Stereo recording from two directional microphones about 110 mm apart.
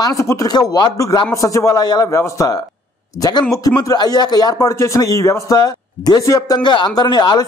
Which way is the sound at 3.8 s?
35° left (ahead or behind).